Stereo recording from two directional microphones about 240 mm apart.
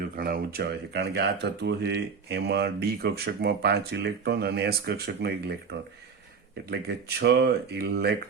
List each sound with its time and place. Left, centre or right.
0.0 s speech: right
6.7 s speech: right